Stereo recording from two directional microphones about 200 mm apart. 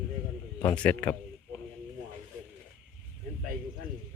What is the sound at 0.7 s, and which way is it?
Speech, 5° left (ahead or behind).